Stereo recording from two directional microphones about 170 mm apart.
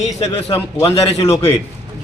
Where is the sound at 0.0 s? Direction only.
40° left (ahead or behind).